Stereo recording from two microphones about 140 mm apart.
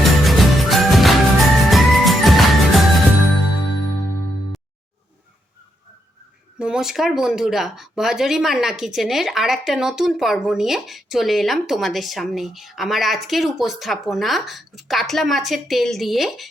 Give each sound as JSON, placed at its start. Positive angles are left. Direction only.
{"t": 0.0, "sound": "music", "side_deg": 0}
{"t": 6.6, "sound": "speech", "side_deg": -5}